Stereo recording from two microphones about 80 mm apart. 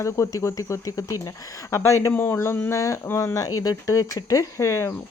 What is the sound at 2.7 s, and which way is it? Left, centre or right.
Speech, left.